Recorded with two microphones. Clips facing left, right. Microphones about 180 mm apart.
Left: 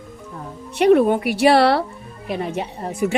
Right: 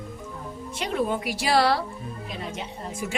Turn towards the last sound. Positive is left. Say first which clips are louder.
# left 10 dB
turn(degrees=60)  # may be behind; listen again after turning